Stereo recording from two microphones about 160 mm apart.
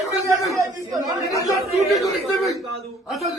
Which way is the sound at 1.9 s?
Centre (ahead or behind).